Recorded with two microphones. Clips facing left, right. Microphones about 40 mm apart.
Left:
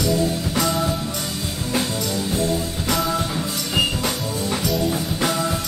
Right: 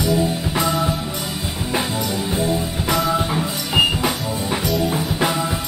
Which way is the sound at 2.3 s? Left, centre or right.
Centre.